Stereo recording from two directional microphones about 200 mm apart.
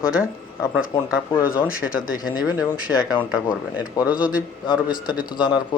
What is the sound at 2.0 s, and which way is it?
Speech, 45° left (ahead or behind).